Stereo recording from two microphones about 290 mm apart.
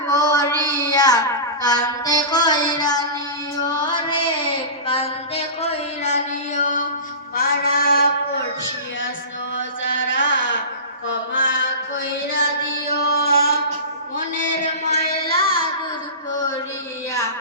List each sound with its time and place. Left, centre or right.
0.1 s a sound: centre
3.8 s child singing: centre
7.3 s a sound: left
9.6 s mantra: left
12.9 s music: left
14.8 s child singing: left